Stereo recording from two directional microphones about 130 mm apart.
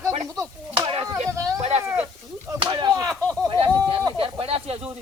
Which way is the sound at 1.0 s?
25° right (ahead or behind).